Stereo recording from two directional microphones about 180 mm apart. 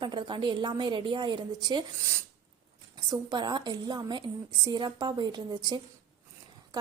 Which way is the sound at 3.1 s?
25° right (ahead or behind).